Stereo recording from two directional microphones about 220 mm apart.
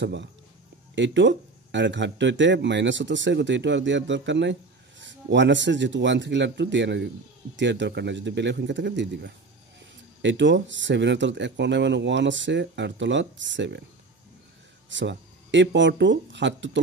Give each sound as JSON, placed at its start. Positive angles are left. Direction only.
{"t": 0.0, "sound": "a man's voice", "side_deg": -50}
{"t": 14.9, "sound": "speech", "side_deg": -55}